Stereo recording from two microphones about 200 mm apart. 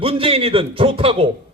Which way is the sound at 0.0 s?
25° right (ahead or behind).